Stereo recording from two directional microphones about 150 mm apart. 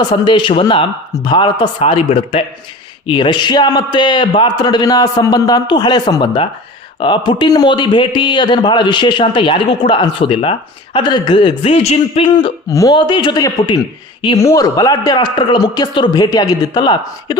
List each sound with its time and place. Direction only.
0.0 s a man's voice: 30° left (ahead or behind)
12.3 s speech: 30° left (ahead or behind)
14.3 s a man's voice: 20° left (ahead or behind)